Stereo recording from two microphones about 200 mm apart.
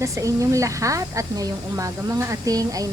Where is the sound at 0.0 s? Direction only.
15° right (ahead or behind).